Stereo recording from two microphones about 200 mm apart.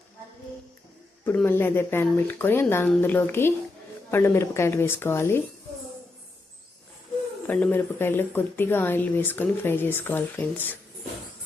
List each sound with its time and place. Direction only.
1.2 s speech: 10° left (ahead or behind)
7.4 s speech: 5° left (ahead or behind)